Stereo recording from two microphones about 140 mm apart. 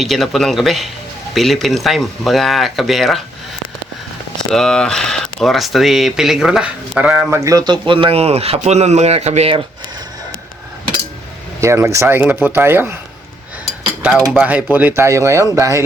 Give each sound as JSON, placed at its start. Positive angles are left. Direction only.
{"t": 0.0, "sound": "speech", "side_deg": 0}
{"t": 4.4, "sound": "speech", "side_deg": 5}
{"t": 11.6, "sound": "speech", "side_deg": -20}
{"t": 14.3, "sound": "speech", "side_deg": -10}